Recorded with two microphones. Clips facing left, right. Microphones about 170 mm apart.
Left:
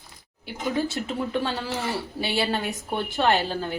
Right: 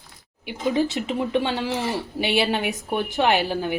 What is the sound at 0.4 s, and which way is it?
Speech, 20° right (ahead or behind).